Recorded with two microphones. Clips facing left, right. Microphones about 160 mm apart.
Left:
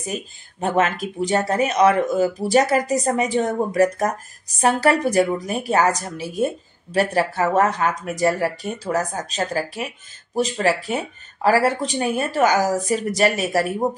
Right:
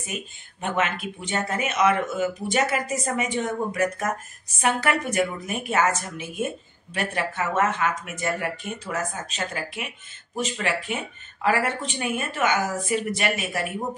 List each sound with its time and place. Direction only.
0.0 s speech: 35° left (ahead or behind)